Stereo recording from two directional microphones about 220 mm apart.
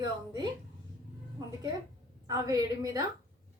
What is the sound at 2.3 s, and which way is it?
Speech, 15° right (ahead or behind).